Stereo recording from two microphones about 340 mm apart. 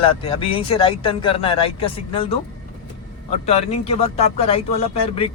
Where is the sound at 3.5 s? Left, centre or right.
Centre.